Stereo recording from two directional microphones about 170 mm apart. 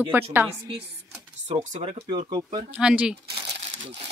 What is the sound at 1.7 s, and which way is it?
Speech, 40° right (ahead or behind).